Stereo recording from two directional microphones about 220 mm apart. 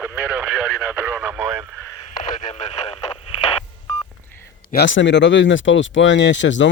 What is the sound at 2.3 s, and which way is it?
Radio, 30° left (ahead or behind).